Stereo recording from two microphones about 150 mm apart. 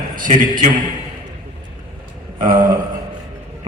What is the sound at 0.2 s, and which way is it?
Speech, 65° right (ahead or behind).